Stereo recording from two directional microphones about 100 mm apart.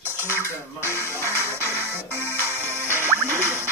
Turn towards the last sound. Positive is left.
turn(degrees=-25)  # may be behind; listen again after turning